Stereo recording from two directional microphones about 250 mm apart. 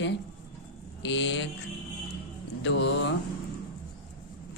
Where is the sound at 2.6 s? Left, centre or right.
Left.